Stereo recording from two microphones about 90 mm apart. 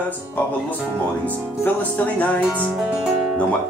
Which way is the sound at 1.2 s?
15° left (ahead or behind).